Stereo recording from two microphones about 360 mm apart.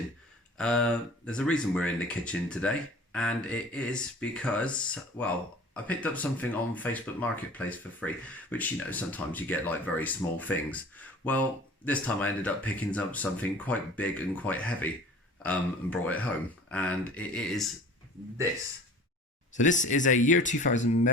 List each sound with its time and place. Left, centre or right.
0.5 s speech: centre
5.7 s speech: centre
19.5 s speech: left